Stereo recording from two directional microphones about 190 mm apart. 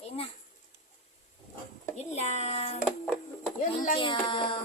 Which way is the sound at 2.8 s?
5° left (ahead or behind).